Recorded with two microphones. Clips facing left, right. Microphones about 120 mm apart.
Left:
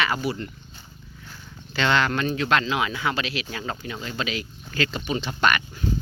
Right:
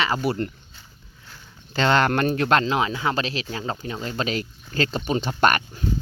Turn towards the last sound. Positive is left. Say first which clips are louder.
# right 3 dB
turn(degrees=-45)  # may be behind; listen again after turning